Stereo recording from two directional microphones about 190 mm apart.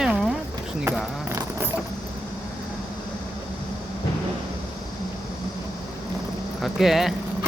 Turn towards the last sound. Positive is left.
turn(degrees=0)  # may be behind; listen again after turning